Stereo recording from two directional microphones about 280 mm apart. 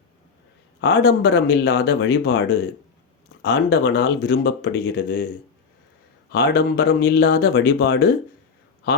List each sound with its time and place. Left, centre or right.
0.8 s speech: left
6.3 s speech: left